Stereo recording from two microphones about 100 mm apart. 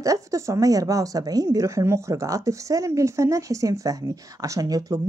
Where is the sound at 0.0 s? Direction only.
35° right (ahead or behind).